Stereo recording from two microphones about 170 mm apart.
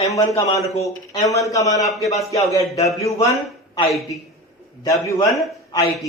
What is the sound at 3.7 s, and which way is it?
A man's voice, 20° left (ahead or behind).